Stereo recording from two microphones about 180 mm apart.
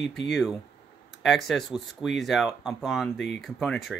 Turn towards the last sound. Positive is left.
turn(degrees=0)  # may be behind; listen again after turning